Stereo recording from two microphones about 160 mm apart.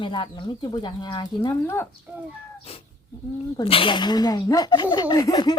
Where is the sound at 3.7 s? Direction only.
35° left (ahead or behind).